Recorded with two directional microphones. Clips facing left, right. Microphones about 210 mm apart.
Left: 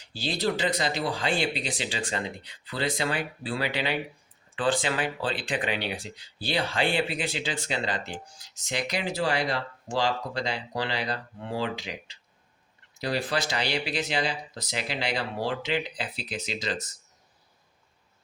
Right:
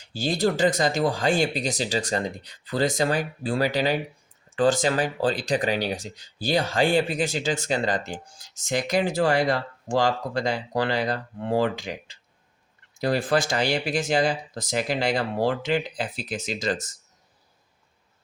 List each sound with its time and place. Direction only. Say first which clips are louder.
0.1 s speech: right 4 dB; 45° right (ahead or behind)